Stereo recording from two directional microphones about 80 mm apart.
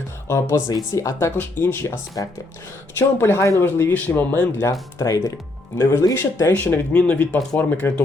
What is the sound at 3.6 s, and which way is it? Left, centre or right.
Speech, left.